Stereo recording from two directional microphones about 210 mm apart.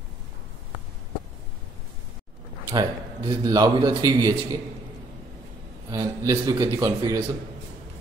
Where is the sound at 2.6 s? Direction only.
20° right (ahead or behind).